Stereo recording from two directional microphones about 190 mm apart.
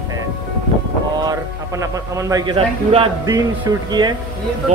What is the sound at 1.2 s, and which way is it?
A man's voice, 20° right (ahead or behind).